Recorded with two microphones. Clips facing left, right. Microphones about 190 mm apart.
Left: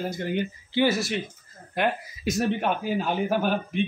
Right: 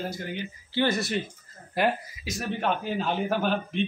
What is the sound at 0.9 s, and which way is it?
A woman's voice, centre (ahead or behind).